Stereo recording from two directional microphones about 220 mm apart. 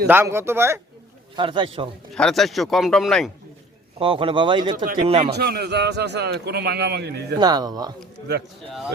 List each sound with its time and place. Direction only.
0.1 s speech: 10° right (ahead or behind)
1.4 s speech: 25° right (ahead or behind)
2.1 s speech: centre (ahead or behind)
3.9 s speech: 25° right (ahead or behind)
4.8 s a man's voice: 40° right (ahead or behind)
7.3 s speech: 20° right (ahead or behind)